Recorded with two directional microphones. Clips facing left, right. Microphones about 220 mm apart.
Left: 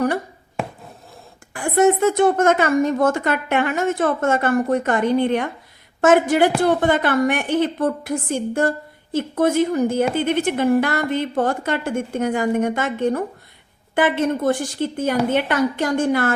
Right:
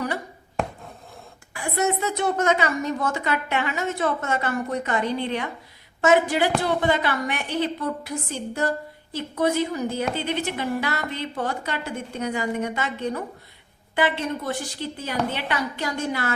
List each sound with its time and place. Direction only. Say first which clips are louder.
1.5 s a woman's voice: left 8 dB; 50° left (ahead or behind)